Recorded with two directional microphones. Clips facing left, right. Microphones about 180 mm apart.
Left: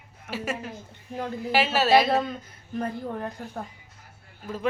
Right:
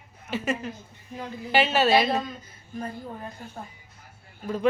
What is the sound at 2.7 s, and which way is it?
Speech, 65° left (ahead or behind).